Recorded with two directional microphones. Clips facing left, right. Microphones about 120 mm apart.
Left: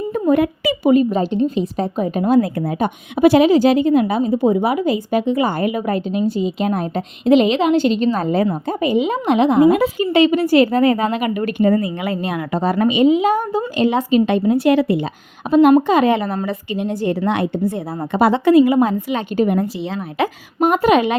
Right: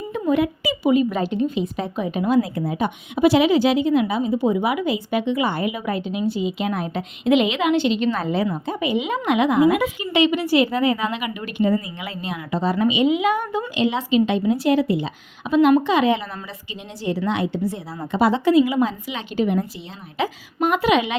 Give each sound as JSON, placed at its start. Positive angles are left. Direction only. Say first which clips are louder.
{"t": 0.1, "sound": "speech", "louder": "left 4 dB", "side_deg": 50}
{"t": 1.1, "sound": "a woman's voice", "louder": "left 4 dB", "side_deg": 30}
{"t": 13.1, "sound": "a woman's voice", "louder": "left 5 dB", "side_deg": 35}
{"t": 15.4, "sound": "a woman's voice", "louder": "left 4 dB", "side_deg": 40}
{"t": 20.7, "sound": "a woman's voice", "louder": "left 5 dB", "side_deg": 45}